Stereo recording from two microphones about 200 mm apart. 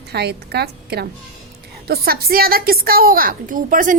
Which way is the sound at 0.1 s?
55° right (ahead or behind).